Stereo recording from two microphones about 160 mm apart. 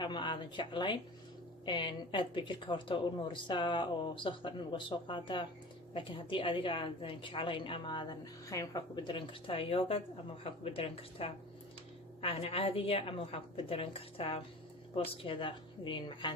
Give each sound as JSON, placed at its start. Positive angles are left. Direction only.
{"t": 0.0, "sound": "a woman's voice", "side_deg": 30}